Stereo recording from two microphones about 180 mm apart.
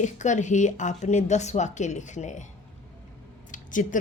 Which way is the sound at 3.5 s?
45° left (ahead or behind).